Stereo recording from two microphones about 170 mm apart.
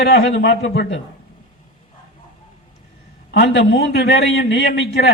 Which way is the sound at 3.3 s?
80° left.